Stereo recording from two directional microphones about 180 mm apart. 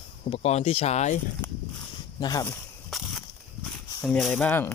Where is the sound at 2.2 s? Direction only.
25° left (ahead or behind).